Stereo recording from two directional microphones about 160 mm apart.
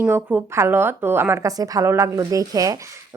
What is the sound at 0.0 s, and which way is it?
A woman's voice, 10° right (ahead or behind).